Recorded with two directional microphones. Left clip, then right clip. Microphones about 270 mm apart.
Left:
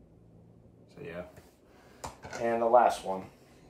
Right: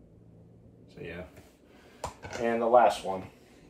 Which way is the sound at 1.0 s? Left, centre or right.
Centre.